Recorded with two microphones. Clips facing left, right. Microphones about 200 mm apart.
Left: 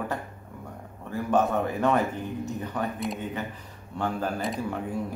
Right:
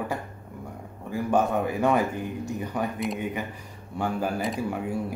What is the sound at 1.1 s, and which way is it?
A man's voice, 10° right (ahead or behind).